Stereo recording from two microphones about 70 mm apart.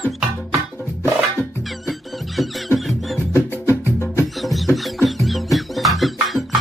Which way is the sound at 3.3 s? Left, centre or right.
Left.